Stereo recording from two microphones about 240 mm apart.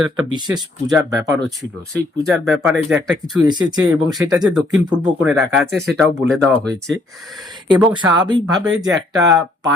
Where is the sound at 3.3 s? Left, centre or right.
Centre.